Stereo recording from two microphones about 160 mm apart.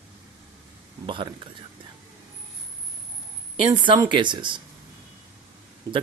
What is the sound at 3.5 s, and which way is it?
Speech, 30° right (ahead or behind).